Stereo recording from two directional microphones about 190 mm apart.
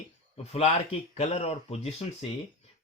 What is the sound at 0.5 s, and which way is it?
Speech, 35° left (ahead or behind).